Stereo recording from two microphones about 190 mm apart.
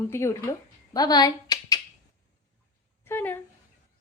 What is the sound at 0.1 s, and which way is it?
Speech, 15° left (ahead or behind).